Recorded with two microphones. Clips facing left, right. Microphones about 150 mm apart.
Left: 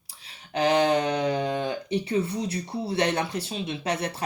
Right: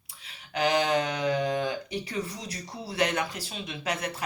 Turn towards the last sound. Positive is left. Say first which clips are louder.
# left 4 dB
turn(degrees=30)  # may be behind; listen again after turning